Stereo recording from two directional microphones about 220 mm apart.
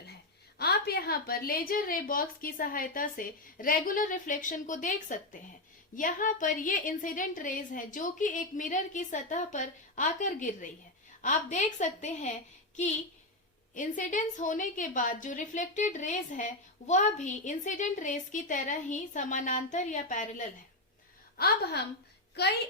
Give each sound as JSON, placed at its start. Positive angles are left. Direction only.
{"t": 0.6, "sound": "a woman's voice", "side_deg": 45}